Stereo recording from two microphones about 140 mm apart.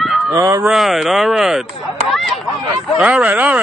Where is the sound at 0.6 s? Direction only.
Centre (ahead or behind).